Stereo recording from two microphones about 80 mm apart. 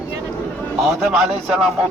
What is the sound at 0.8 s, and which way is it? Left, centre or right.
Speech, centre.